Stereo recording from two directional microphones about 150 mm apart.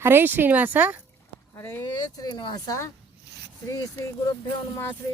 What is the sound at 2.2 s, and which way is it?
Speech, 30° left (ahead or behind).